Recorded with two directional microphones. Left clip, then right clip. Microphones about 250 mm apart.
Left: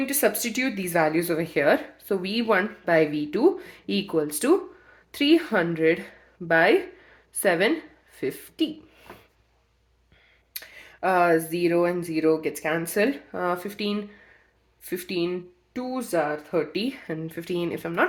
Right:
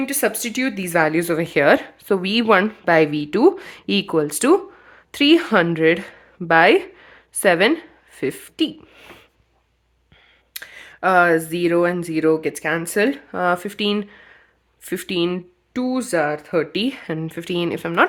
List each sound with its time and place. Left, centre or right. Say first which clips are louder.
0.0 s speech: right 3 dB; right
8.1 s a sound: right 5 dB; right
10.5 s speech: right 6 dB; right